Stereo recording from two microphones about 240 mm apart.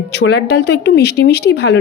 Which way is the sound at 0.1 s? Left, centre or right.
Left.